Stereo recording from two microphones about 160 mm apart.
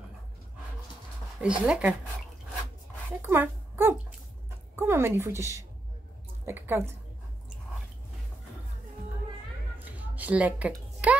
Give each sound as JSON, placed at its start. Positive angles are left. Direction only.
{"t": 1.4, "sound": "a woman's voice", "side_deg": -5}
{"t": 3.2, "sound": "a woman's voice", "side_deg": -15}
{"t": 9.8, "sound": "a sound", "side_deg": -10}
{"t": 11.0, "sound": "music", "side_deg": -10}